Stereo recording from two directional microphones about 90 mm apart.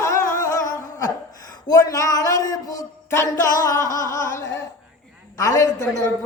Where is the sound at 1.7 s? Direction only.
40° left (ahead or behind).